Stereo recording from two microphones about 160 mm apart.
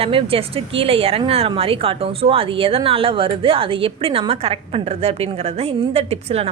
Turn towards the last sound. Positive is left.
turn(degrees=-40)  # may be behind; listen again after turning